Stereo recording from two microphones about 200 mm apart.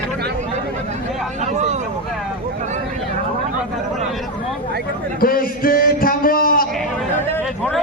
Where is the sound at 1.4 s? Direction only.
35° right (ahead or behind).